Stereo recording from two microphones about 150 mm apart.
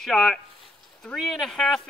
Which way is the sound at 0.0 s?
5° left (ahead or behind).